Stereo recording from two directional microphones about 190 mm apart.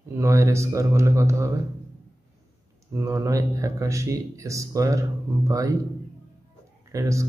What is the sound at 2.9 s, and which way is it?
Speech, 15° right (ahead or behind).